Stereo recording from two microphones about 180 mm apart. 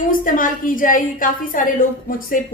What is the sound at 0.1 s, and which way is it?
A woman's voice, 50° left (ahead or behind).